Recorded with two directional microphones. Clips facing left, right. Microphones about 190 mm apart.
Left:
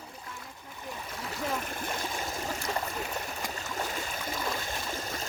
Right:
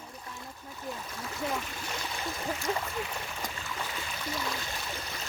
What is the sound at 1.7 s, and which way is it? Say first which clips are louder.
Stream: left 3 dB; 50° left (ahead or behind).